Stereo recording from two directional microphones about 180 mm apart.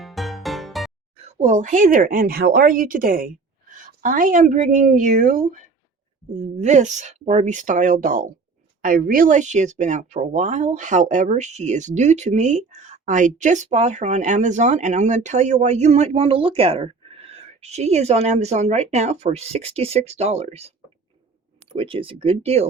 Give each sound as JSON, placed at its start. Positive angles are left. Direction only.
{"t": 0.0, "sound": "music", "side_deg": 0}
{"t": 1.1, "sound": "speech", "side_deg": -35}
{"t": 21.8, "sound": "speech", "side_deg": -30}